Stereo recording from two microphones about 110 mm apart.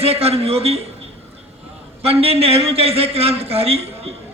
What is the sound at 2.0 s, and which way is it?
A man's voice, 65° right (ahead or behind).